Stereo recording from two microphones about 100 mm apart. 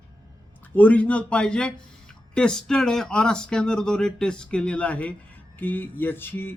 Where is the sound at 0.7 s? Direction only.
15° left (ahead or behind).